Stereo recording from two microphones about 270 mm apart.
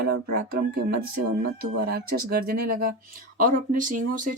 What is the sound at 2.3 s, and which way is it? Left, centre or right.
Speech, right.